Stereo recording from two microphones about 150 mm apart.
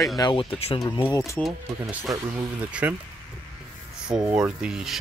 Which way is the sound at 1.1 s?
20° left (ahead or behind).